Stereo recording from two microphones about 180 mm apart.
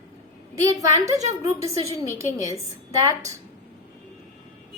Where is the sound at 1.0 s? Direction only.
15° right (ahead or behind).